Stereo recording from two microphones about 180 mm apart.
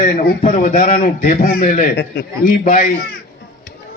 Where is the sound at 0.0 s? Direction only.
50° left (ahead or behind).